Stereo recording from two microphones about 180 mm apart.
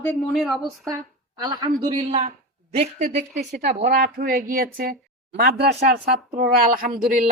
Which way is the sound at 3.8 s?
50° right (ahead or behind).